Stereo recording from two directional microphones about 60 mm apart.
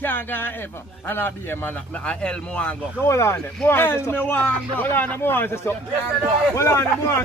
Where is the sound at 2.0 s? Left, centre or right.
Centre.